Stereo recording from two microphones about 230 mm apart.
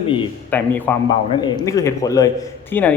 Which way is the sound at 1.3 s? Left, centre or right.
Centre.